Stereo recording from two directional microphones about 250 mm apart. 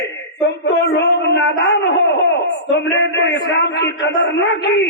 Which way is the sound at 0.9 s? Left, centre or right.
Left.